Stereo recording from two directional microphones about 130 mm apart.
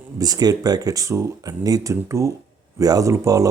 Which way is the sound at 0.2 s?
30° right (ahead or behind).